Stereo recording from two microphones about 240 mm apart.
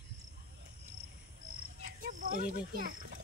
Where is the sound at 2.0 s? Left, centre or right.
Right.